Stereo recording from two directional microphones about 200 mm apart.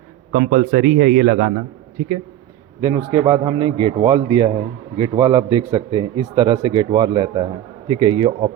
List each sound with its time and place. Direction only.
0.3 s a man's voice: 40° right (ahead or behind)
2.8 s speech: 20° right (ahead or behind)